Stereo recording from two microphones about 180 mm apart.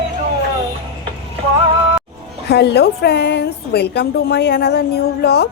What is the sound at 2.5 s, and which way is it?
A woman's voice, 65° left (ahead or behind).